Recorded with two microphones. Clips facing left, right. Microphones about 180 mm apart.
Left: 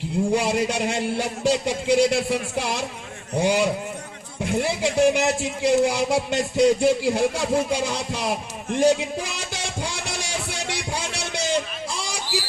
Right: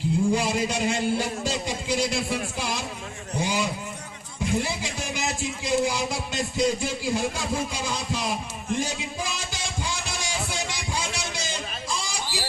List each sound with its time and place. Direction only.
0.3 s a man's voice: 65° left (ahead or behind)